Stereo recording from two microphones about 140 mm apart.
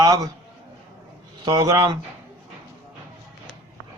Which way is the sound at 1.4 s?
25° right (ahead or behind).